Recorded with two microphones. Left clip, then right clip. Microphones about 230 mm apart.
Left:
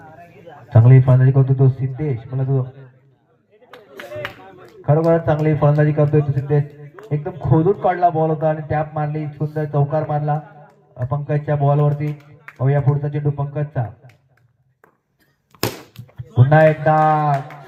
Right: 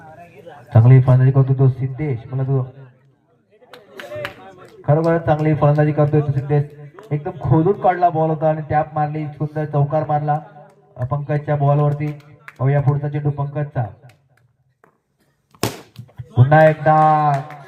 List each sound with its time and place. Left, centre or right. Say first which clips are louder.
0.0 s a man's voice: right 1 dB; right
4.8 s speech: left 1 dB; right
15.5 s a sound: even; centre
16.5 s speech: right 1 dB; right